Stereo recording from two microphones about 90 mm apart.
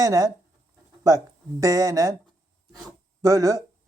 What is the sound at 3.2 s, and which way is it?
Speech, 40° right (ahead or behind).